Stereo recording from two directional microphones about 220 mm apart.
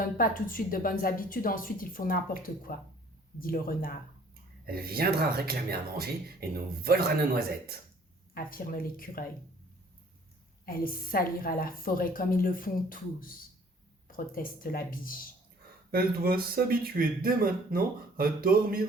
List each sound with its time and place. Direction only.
0.0 s a woman's voice: 40° left (ahead or behind)
4.6 s speech: 45° right (ahead or behind)
8.3 s a woman's voice: 40° left (ahead or behind)
10.7 s a woman's voice: 40° left (ahead or behind)
15.9 s speech: 40° right (ahead or behind)